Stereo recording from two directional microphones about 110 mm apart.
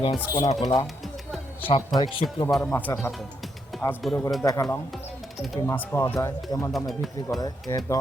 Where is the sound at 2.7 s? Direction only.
20° left (ahead or behind).